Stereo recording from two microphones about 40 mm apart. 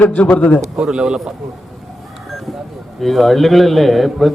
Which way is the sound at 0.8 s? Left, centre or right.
Centre.